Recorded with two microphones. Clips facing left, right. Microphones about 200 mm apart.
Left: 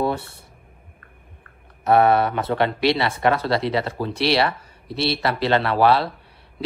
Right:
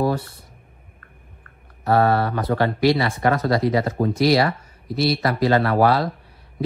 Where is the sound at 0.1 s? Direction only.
25° left (ahead or behind).